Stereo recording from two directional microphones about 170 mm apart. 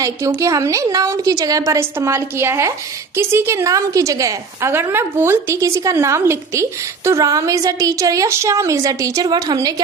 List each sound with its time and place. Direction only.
0.0 s a woman's voice: 15° right (ahead or behind)